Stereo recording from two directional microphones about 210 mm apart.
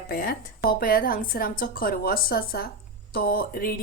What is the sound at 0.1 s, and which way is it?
Speech, 45° left (ahead or behind).